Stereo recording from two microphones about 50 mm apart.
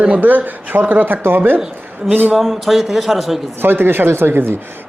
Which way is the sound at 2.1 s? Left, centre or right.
Right.